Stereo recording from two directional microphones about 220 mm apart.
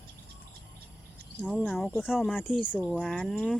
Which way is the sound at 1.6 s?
5° left (ahead or behind).